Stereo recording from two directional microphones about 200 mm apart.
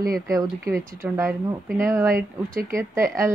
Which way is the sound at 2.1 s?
45° right (ahead or behind).